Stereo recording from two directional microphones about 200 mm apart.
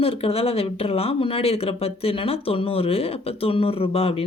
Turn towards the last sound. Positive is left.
turn(degrees=30)  # may be behind; listen again after turning